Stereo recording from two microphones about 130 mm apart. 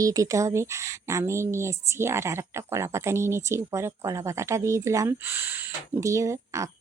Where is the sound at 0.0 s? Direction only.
25° right (ahead or behind).